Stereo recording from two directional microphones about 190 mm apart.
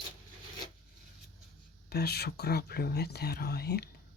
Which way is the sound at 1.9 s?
55° left (ahead or behind).